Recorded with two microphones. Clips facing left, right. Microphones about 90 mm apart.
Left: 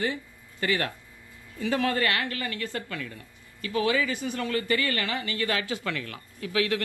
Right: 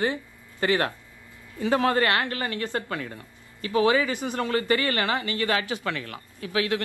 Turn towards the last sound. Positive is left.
turn(degrees=-30)  # may be behind; listen again after turning